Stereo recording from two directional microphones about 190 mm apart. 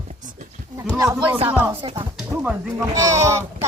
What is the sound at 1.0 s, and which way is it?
Speech, 20° right (ahead or behind).